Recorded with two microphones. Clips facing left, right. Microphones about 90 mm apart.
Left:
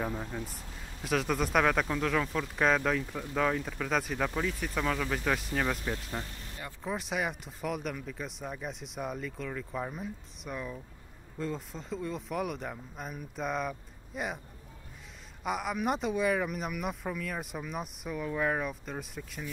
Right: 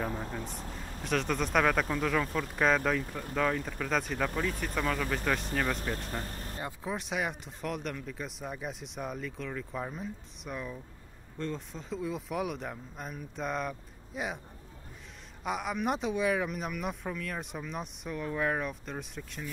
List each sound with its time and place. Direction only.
1.0 s speech: 5° left (ahead or behind)
6.2 s vehicle: 45° right (ahead or behind)
6.8 s speech: centre (ahead or behind)
15.4 s speech: centre (ahead or behind)